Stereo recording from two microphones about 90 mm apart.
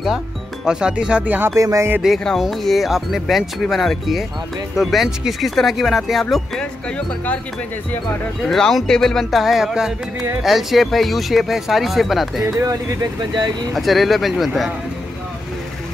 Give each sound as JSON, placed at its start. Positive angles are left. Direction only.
{"t": 0.7, "sound": "speech", "side_deg": -10}
{"t": 1.6, "sound": "music", "side_deg": -35}
{"t": 2.0, "sound": "speech", "side_deg": 0}
{"t": 8.5, "sound": "speech", "side_deg": 5}
{"t": 13.7, "sound": "speech", "side_deg": 0}